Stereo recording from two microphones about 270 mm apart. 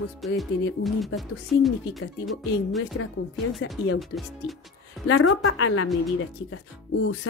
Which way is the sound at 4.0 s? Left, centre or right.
Centre.